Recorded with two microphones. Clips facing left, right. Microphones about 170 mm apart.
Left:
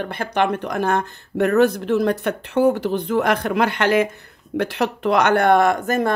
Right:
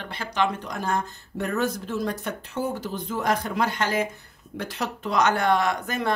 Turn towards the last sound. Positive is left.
turn(degrees=50)  # may be behind; listen again after turning